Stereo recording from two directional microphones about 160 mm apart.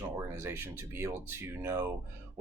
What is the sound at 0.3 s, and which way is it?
Speech, 15° right (ahead or behind).